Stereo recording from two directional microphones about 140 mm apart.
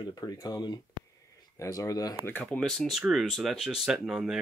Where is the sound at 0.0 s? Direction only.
25° left (ahead or behind).